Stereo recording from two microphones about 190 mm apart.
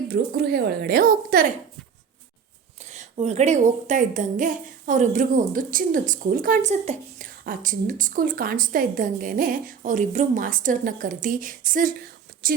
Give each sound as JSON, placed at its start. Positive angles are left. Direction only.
{"t": 0.1, "sound": "a woman's voice", "side_deg": -55}
{"t": 2.9, "sound": "a woman's voice", "side_deg": -35}
{"t": 12.3, "sound": "whispering", "side_deg": -50}